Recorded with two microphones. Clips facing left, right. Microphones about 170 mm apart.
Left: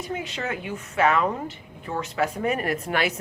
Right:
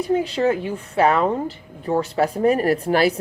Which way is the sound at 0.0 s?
35° right (ahead or behind).